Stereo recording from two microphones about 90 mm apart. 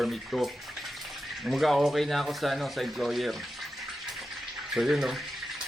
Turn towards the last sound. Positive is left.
turn(degrees=-5)  # may be behind; listen again after turning